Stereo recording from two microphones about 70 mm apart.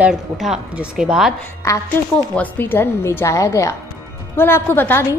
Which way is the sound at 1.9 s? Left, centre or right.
Left.